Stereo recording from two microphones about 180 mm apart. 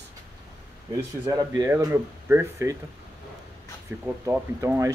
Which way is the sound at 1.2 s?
20° right (ahead or behind).